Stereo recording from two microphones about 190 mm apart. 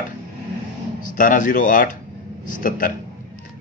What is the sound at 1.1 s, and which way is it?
Speech, 45° left (ahead or behind).